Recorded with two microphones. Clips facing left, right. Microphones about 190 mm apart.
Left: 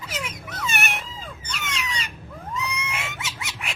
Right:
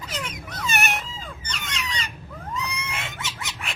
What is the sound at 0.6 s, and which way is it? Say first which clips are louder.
Cat: right 2 dB; 40° right (ahead or behind).